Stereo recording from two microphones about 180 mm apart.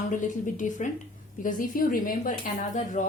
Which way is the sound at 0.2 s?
45° left (ahead or behind).